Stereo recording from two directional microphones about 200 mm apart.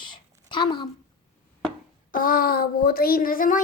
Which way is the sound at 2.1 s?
45° left (ahead or behind).